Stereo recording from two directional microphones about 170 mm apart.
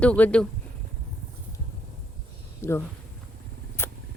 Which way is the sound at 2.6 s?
15° left (ahead or behind).